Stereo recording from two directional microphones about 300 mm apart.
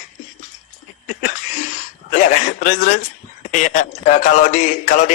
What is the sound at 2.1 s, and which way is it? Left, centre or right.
Speech, left.